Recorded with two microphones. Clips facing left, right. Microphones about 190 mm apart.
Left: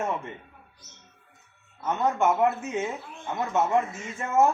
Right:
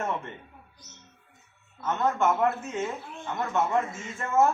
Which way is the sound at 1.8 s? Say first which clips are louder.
Left 1 dB; 15° left (ahead or behind).